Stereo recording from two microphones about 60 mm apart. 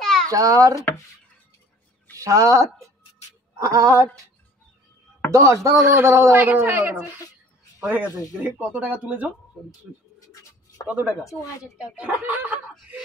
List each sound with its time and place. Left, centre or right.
0.0 s a sound: centre
0.3 s a child's voice: right
2.1 s speech: right
5.3 s speech: right
6.3 s speech: right
9.9 s speech: centre
10.9 s speech: right